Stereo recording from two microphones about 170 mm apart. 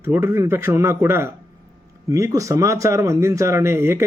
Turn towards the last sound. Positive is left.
turn(degrees=-15)  # may be behind; listen again after turning